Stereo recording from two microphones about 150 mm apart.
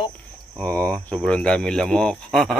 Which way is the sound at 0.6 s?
10° left (ahead or behind).